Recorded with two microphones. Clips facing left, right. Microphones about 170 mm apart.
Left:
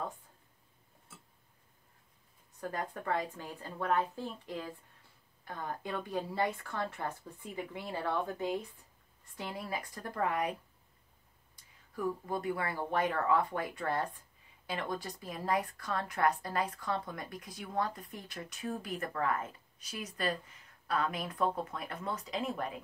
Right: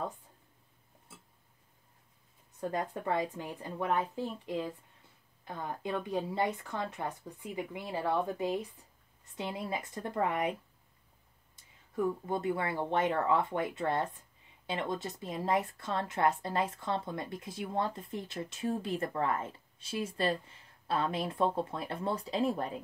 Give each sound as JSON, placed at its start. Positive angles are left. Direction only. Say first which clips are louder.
{"t": 2.6, "sound": "speech", "louder": "right 4 dB", "side_deg": -20}
{"t": 11.5, "sound": "speech", "louder": "right 6 dB", "side_deg": -25}